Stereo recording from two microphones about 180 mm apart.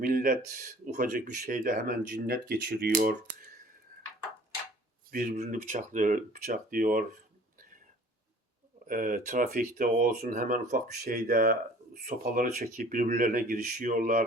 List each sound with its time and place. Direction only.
0.0 s speech: 50° right (ahead or behind)
5.1 s speech: 50° right (ahead or behind)
8.9 s speech: 50° right (ahead or behind)